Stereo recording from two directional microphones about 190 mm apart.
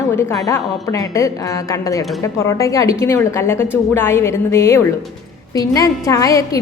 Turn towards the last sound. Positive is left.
turn(degrees=15)  # may be behind; listen again after turning